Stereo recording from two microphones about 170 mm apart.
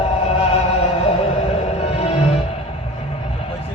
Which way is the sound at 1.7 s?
40° left (ahead or behind).